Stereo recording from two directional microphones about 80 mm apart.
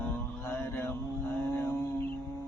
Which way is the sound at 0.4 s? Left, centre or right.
Left.